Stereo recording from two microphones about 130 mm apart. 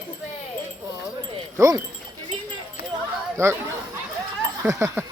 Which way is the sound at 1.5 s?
25° right (ahead or behind).